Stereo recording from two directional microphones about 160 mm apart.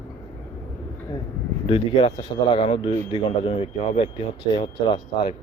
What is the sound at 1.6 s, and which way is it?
Speech, 35° left (ahead or behind).